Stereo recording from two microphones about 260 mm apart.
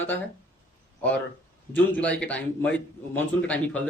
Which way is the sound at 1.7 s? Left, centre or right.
Centre.